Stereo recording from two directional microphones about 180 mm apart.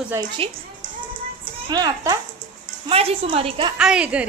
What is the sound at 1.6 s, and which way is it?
Speech, 20° right (ahead or behind).